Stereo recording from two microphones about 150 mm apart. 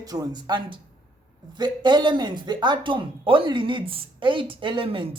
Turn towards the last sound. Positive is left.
turn(degrees=-35)  # may be behind; listen again after turning